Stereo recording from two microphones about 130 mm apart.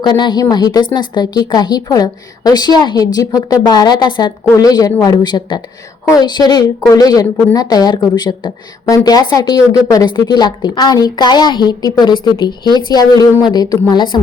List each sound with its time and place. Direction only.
0.0 s a woman's voice: 35° left (ahead or behind)